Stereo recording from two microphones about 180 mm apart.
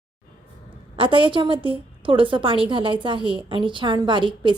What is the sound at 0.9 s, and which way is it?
A woman's voice, 30° right (ahead or behind).